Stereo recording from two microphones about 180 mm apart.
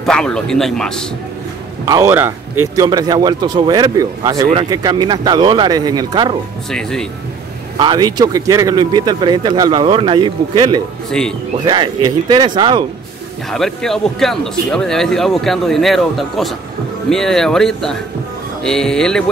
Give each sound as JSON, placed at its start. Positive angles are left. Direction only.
{"t": 0.0, "sound": "speech", "side_deg": 5}
{"t": 1.9, "sound": "speech", "side_deg": -15}
{"t": 6.7, "sound": "speech", "side_deg": 5}
{"t": 7.8, "sound": "speech", "side_deg": -25}
{"t": 11.1, "sound": "speech", "side_deg": 5}
{"t": 11.6, "sound": "speech", "side_deg": -25}
{"t": 13.5, "sound": "speech", "side_deg": 0}